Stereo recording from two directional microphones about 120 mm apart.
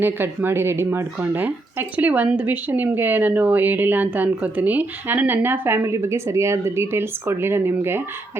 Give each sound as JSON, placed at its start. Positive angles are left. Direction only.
{"t": 0.0, "sound": "speech", "side_deg": -15}